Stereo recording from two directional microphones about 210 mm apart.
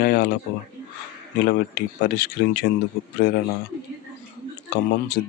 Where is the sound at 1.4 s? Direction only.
50° left (ahead or behind).